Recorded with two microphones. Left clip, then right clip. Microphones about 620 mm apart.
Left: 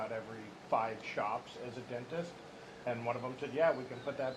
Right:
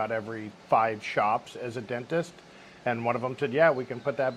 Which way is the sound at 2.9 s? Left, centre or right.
Right.